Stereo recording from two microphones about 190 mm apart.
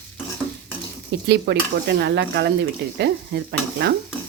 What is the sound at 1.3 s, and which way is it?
Speech, 65° right (ahead or behind).